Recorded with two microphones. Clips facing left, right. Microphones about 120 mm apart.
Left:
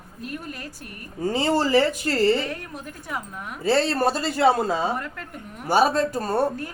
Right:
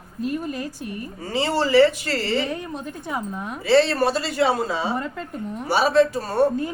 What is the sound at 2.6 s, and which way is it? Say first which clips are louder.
Speech: right 5 dB; 20° right (ahead or behind).